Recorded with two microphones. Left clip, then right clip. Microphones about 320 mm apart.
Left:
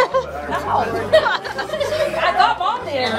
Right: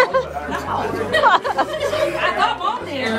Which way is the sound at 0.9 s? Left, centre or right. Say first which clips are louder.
Right 3 dB; centre.